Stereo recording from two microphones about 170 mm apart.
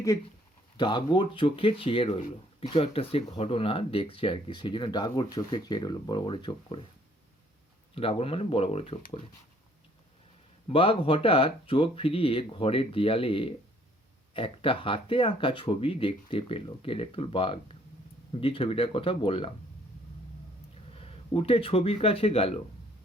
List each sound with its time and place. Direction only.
0.8 s speech: 25° left (ahead or behind)
7.9 s speech: 35° left (ahead or behind)
10.7 s speech: 35° left (ahead or behind)
20.9 s speech: 35° left (ahead or behind)